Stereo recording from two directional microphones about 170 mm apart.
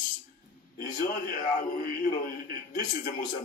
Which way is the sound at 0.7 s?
50° left (ahead or behind).